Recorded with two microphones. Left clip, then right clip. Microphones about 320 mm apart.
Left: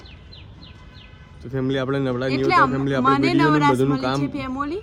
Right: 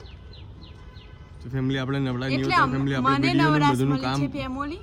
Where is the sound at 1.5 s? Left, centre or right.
Centre.